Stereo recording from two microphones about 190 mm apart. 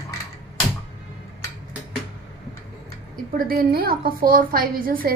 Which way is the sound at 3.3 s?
50° right (ahead or behind).